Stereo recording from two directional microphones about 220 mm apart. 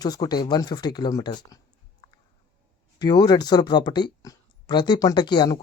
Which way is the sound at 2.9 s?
20° left (ahead or behind).